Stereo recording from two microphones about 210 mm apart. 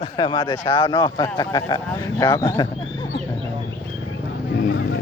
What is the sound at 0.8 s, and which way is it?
Speech, 20° left (ahead or behind).